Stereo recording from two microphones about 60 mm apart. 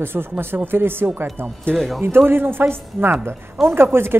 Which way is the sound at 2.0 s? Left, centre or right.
Right.